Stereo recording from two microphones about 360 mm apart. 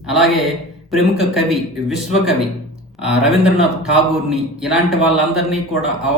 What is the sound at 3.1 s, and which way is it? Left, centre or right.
Speech, centre.